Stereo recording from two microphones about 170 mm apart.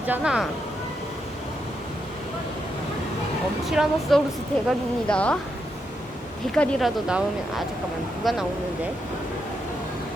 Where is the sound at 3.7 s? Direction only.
Centre (ahead or behind).